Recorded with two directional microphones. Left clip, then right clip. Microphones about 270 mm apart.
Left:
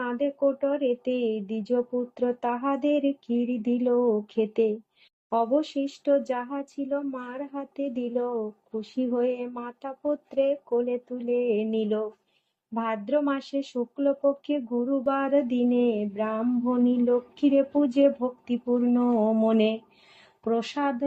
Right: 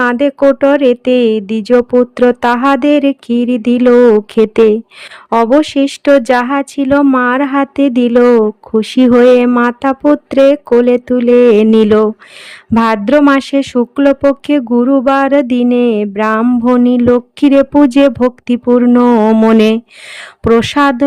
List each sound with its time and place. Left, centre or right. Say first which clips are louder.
0.0 s speech: right 16 dB; right